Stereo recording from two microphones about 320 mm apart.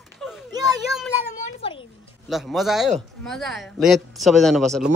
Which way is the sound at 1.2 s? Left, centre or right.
Left.